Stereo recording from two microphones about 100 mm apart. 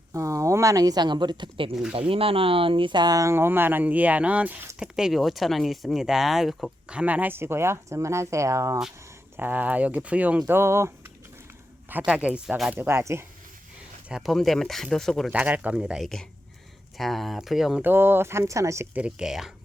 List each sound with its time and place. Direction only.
0.1 s speech: 30° right (ahead or behind); by 1.7 s 55° right (ahead or behind)
1.9 s speech: 65° right (ahead or behind); by 4.7 s 15° right (ahead or behind)
4.8 s speech: 5° right (ahead or behind); by 8.8 s 30° right (ahead or behind)
9.4 s speech: 20° right (ahead or behind)
10.4 s speech: 25° right (ahead or behind)
12.0 s speech: 10° right (ahead or behind)
12.7 s speech: 25° right (ahead or behind)
14.1 s speech: centre (ahead or behind)
15.3 s speech: 15° right (ahead or behind)
17.0 s speech: centre (ahead or behind)
17.8 s speech: 20° right (ahead or behind)
18.9 s speech: 10° right (ahead or behind)